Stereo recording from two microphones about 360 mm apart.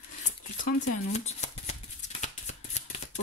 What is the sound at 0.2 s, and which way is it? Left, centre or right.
Shuffling cards, left.